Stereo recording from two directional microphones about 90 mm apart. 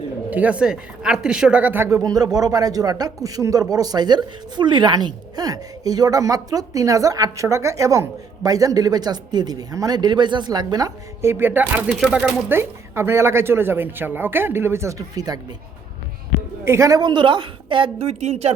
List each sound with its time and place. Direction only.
0.3 s a woman's voice: 15° right (ahead or behind)
1.8 s speech: 35° right (ahead or behind)
11.2 s speech: 25° right (ahead or behind); by 15.4 s 45° right (ahead or behind)
16.6 s a woman's voice: 35° right (ahead or behind)
17.0 s a woman's voice: 55° right (ahead or behind)